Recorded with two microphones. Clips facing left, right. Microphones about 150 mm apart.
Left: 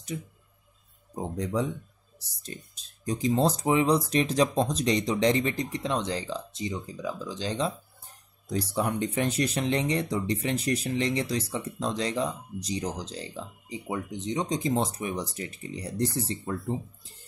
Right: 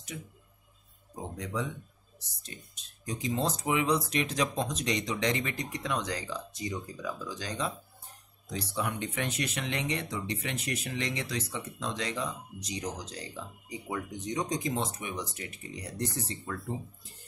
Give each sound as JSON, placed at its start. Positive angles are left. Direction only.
{"t": 1.1, "sound": "speech", "side_deg": 35}
{"t": 8.5, "sound": "speech", "side_deg": 45}